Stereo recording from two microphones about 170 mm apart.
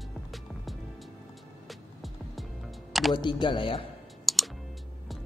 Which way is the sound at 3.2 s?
30° left (ahead or behind).